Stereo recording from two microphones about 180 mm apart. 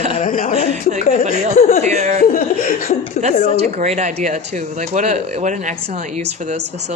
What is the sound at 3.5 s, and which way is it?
Speech, 40° right (ahead or behind).